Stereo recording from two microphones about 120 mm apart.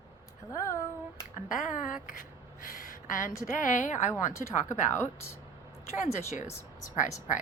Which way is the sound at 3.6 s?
90° left.